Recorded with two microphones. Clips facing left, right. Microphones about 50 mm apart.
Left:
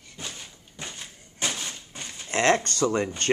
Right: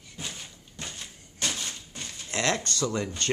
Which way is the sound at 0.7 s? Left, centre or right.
Centre.